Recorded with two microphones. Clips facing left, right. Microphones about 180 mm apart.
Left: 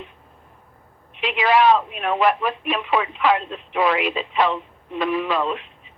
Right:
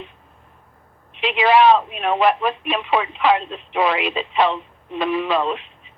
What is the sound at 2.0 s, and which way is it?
Speech, 25° right (ahead or behind).